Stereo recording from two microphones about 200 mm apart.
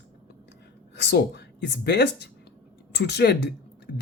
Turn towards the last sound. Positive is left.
turn(degrees=55)  # may be behind; listen again after turning